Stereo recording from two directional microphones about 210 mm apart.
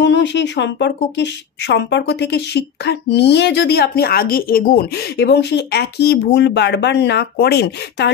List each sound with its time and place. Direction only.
0.0 s speech: 55° left (ahead or behind)